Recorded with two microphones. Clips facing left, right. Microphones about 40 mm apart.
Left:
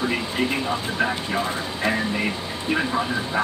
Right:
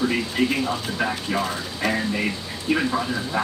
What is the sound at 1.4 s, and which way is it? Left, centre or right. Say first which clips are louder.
Speech: left 1 dB; left.